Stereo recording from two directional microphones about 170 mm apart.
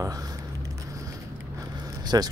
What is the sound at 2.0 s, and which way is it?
Speech, 25° right (ahead or behind).